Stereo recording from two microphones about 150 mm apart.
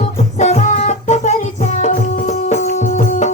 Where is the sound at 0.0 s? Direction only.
50° left (ahead or behind).